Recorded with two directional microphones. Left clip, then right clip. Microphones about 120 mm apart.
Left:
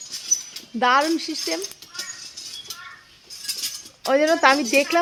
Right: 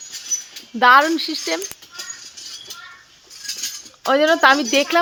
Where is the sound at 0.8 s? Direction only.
15° right (ahead or behind).